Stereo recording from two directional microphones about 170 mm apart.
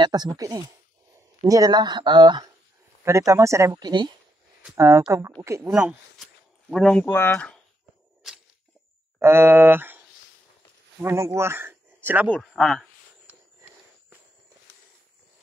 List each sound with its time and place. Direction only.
0.0 s speech: 25° right (ahead or behind)
5.7 s speech: 5° right (ahead or behind)
9.2 s speech: 15° right (ahead or behind)
12.4 s speech: centre (ahead or behind)